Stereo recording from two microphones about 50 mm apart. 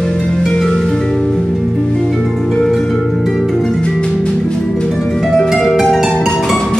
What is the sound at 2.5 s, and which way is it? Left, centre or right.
Harp, centre.